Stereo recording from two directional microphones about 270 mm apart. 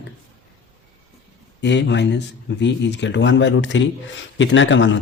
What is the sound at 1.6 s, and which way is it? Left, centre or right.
Speech, left.